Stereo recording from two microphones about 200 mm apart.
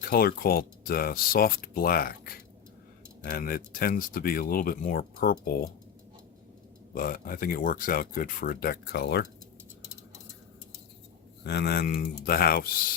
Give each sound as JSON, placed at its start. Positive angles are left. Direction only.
{"t": 0.0, "sound": "speech", "side_deg": 50}
{"t": 6.9, "sound": "speech", "side_deg": 45}
{"t": 11.4, "sound": "speech", "side_deg": 55}